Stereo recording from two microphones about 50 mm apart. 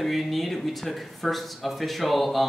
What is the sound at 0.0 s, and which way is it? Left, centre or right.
Speech, centre.